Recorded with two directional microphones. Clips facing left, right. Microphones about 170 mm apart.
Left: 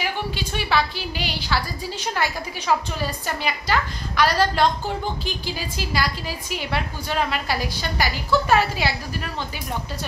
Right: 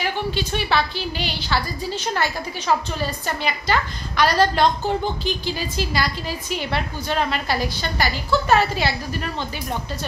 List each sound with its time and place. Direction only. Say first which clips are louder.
0.0 s a woman's voice: right 3 dB; 10° left (ahead or behind)